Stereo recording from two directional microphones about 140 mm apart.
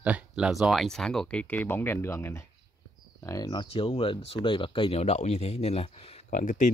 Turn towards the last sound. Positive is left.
turn(degrees=60)  # may be behind; listen again after turning